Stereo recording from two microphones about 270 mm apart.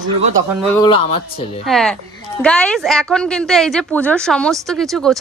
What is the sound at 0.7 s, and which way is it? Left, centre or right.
Speech, centre.